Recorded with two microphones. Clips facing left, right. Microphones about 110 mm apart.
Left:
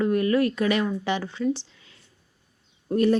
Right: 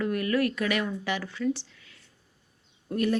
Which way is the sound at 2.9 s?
30° left (ahead or behind).